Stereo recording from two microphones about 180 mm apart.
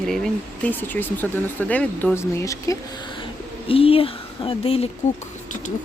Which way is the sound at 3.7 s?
30° left (ahead or behind).